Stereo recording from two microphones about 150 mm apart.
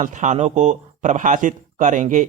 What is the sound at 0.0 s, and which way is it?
Speech, 55° right (ahead or behind).